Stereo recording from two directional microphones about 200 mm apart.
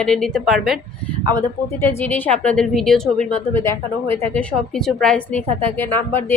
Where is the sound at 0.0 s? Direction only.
5° left (ahead or behind).